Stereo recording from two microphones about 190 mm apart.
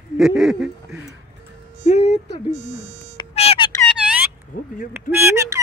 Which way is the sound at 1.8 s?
35° left (ahead or behind).